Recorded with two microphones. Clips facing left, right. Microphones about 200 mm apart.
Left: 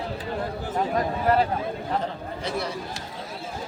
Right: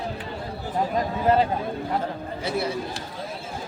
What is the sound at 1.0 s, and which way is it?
Speech, 20° right (ahead or behind).